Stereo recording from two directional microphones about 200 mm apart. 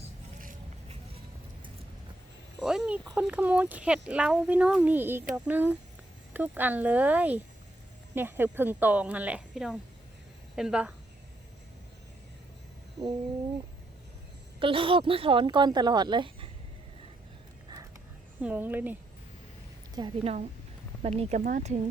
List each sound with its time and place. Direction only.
0.4 s a sound: 30° right (ahead or behind)
2.6 s a woman's voice: 5° right (ahead or behind)
13.0 s speech: 15° right (ahead or behind)
14.6 s speech: 25° right (ahead or behind)
18.4 s speech: 10° right (ahead or behind)
20.0 s speech: 30° right (ahead or behind)